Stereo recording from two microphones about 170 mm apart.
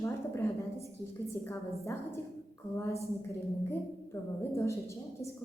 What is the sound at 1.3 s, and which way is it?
A woman's voice, 15° left (ahead or behind).